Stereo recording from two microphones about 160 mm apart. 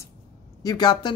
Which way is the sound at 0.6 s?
25° left (ahead or behind).